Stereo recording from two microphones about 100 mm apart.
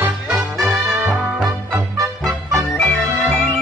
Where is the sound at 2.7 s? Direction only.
15° left (ahead or behind).